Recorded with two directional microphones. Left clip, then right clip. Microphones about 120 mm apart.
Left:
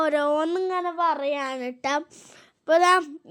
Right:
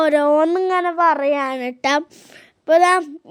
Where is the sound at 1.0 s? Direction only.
35° right (ahead or behind).